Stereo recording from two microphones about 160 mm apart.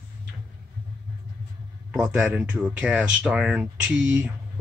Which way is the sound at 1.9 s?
5° right (ahead or behind).